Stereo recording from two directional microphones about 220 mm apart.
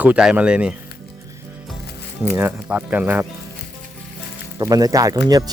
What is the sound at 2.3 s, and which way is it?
Speech, 10° right (ahead or behind).